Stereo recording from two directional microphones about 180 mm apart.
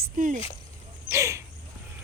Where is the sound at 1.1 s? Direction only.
15° right (ahead or behind).